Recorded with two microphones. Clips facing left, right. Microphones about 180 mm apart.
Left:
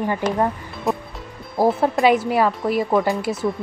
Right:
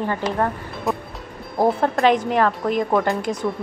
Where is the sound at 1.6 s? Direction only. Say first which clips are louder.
Left 1 dB; 5° left (ahead or behind).